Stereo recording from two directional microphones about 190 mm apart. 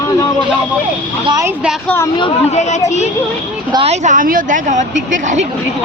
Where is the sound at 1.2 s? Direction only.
20° right (ahead or behind).